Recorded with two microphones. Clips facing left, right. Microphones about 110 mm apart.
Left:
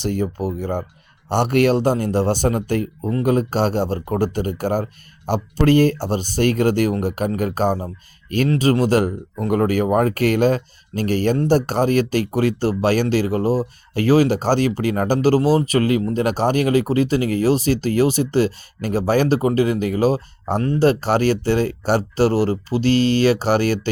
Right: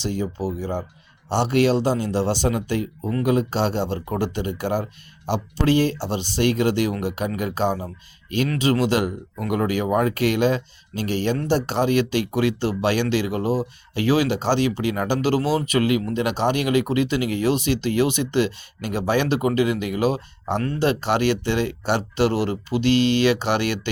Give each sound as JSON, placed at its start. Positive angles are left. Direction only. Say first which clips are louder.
{"t": 0.0, "sound": "speech", "louder": "left 3 dB", "side_deg": 55}